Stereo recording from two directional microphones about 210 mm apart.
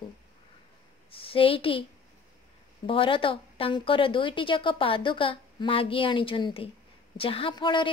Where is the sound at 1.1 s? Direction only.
25° left (ahead or behind).